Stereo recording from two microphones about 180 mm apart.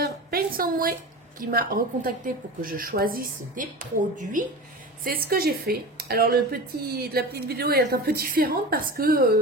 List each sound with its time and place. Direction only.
0.0 s a sound: 55° right (ahead or behind)
1.4 s a woman's voice: 55° right (ahead or behind)
5.0 s a woman's voice: 60° right (ahead or behind)